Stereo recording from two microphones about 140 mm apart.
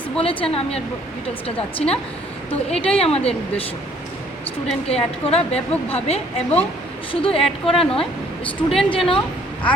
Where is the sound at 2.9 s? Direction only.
45° left (ahead or behind).